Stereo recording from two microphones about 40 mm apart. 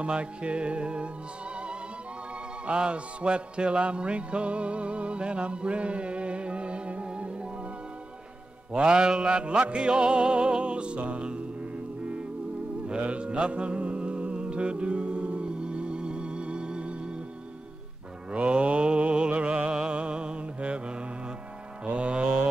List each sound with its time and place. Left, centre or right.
0.0 s music: right
2.6 s music: right
8.7 s music: right
12.8 s mantra: right
18.3 s mantra: right